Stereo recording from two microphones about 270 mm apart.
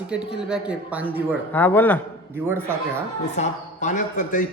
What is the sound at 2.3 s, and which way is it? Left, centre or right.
Speech, centre.